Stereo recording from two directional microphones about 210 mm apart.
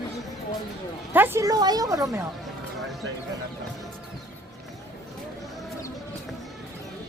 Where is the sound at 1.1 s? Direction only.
10° right (ahead or behind).